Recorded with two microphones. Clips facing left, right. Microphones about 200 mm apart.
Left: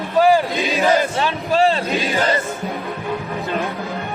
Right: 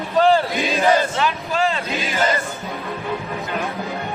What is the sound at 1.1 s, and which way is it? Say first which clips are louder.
Speech: left 3 dB; 30° left (ahead or behind).